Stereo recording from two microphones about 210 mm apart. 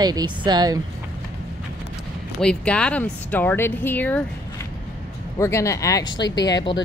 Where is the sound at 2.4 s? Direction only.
5° left (ahead or behind).